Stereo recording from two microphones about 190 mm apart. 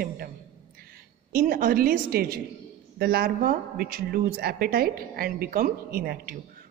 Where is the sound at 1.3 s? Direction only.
50° right (ahead or behind).